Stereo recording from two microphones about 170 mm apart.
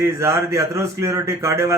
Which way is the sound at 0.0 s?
15° right (ahead or behind).